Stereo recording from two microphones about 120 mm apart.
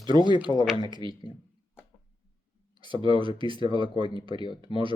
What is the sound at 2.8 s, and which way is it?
Speech, 45° right (ahead or behind).